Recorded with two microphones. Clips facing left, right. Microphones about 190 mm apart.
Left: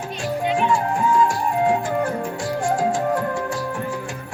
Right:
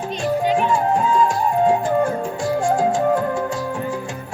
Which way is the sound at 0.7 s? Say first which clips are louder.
Right 2 dB; 20° right (ahead or behind).